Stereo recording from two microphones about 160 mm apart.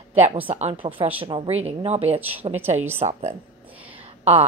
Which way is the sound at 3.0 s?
45° right (ahead or behind).